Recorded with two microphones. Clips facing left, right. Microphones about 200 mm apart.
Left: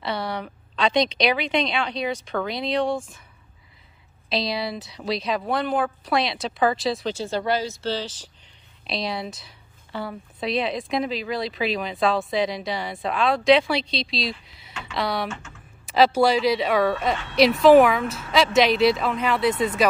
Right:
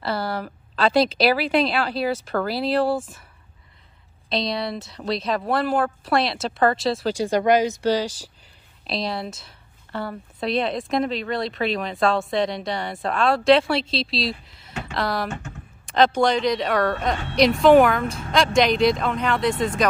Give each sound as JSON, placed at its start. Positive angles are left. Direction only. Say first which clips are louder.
{"t": 0.0, "sound": "a woman's voice", "louder": "right 2 dB", "side_deg": 0}
{"t": 4.3, "sound": "a woman's voice", "louder": "right 1 dB", "side_deg": 0}
{"t": 7.2, "sound": "speech", "louder": "right 6 dB", "side_deg": -15}
{"t": 8.8, "sound": "a woman's voice", "louder": "right 1 dB", "side_deg": 0}
{"t": 15.2, "sound": "speech", "louder": "right 2 dB", "side_deg": -40}
{"t": 15.8, "sound": "a woman's voice", "louder": "left 1 dB", "side_deg": 5}